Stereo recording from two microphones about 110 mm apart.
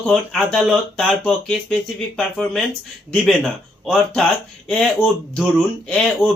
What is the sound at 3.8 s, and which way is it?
Speech, 5° left (ahead or behind).